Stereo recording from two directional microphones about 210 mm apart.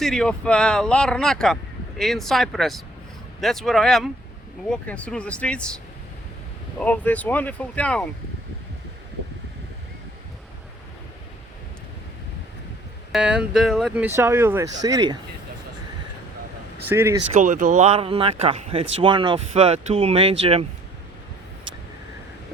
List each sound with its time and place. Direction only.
0.0 s speech: 5° left (ahead or behind)
13.1 s speech: 5° right (ahead or behind)
16.9 s speech: 10° right (ahead or behind)
17.4 s speech: 40° right (ahead or behind)